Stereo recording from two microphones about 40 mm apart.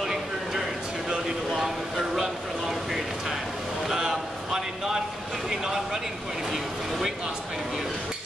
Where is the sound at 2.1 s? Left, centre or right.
Centre.